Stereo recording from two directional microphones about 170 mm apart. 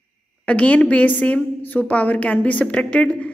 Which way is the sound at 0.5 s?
10° left (ahead or behind).